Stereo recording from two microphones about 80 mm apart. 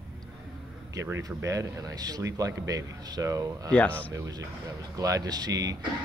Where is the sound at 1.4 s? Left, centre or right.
Right.